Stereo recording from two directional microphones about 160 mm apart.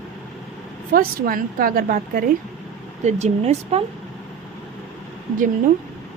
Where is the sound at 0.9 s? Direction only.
65° right (ahead or behind).